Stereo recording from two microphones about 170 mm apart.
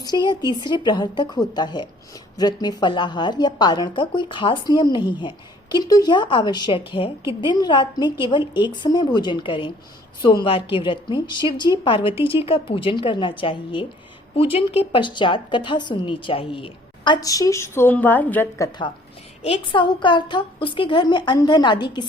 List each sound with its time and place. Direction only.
0.0 s a woman's voice: 25° left (ahead or behind)
19.4 s a woman's voice: 30° left (ahead or behind)